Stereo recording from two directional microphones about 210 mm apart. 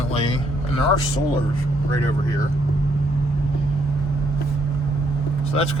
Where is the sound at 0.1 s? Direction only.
30° left (ahead or behind).